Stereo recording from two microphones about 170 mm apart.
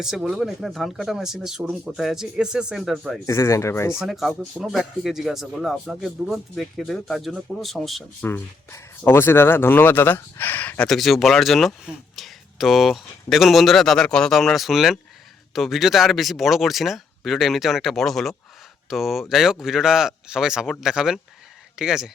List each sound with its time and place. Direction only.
0.0 s speech: centre (ahead or behind)
3.2 s speech: 15° left (ahead or behind)
4.0 s speech: centre (ahead or behind)
8.2 s speech: 15° left (ahead or behind); by 22.1 s 5° right (ahead or behind)